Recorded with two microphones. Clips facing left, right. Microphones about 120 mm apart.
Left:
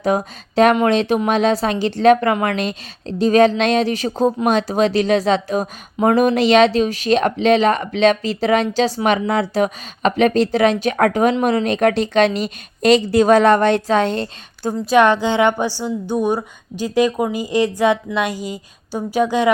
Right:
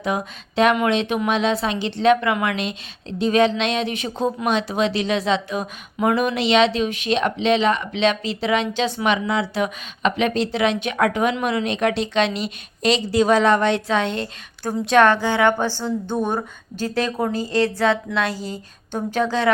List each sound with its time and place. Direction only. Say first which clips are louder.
0.0 s speech: left 6 dB; 40° left (ahead or behind)
14.8 s a woman's voice: left 2 dB; 15° left (ahead or behind)